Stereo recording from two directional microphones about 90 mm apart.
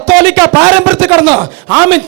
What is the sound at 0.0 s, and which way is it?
A man's voice, 20° right (ahead or behind).